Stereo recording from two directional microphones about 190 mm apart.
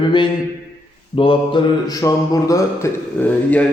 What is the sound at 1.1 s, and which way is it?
Mantra, 25° left (ahead or behind).